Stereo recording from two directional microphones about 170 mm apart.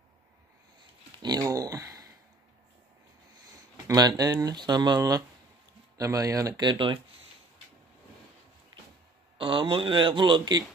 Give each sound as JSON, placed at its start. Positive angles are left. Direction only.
{"t": 1.2, "sound": "speech", "side_deg": -20}
{"t": 3.8, "sound": "speech", "side_deg": -20}
{"t": 9.4, "sound": "speech", "side_deg": -30}